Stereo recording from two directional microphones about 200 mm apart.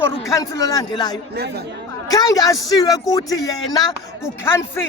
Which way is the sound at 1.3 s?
55° right (ahead or behind).